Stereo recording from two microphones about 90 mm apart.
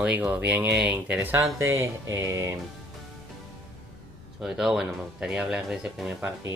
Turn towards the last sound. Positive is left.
turn(degrees=-5)  # may be behind; listen again after turning